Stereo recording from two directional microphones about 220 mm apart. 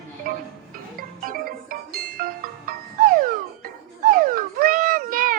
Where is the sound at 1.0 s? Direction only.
40° right (ahead or behind).